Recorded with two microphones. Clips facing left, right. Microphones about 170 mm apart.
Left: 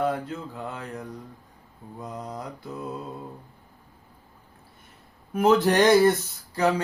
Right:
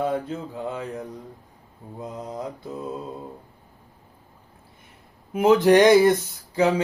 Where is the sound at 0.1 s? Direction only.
20° right (ahead or behind).